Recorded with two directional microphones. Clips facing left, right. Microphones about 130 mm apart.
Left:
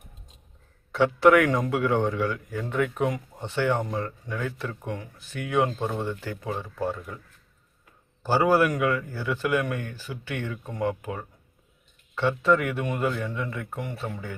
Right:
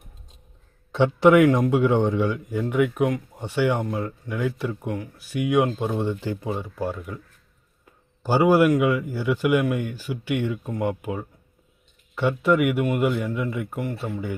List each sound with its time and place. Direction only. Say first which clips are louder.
0.9 s speech: right 3 dB; 20° right (ahead or behind)
8.2 s speech: right 3 dB; 15° right (ahead or behind)